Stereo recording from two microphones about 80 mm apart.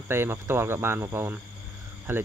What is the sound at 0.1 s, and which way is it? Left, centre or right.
Speech, right.